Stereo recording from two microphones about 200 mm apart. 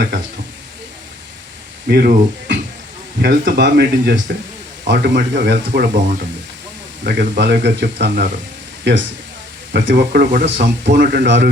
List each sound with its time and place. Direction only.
1.9 s speech: 50° right (ahead or behind)
9.7 s speech: 60° right (ahead or behind)
10.4 s speech: 35° right (ahead or behind)
10.9 s speech: 55° right (ahead or behind)